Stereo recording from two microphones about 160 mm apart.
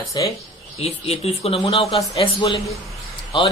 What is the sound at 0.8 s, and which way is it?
Speech, 40° left (ahead or behind).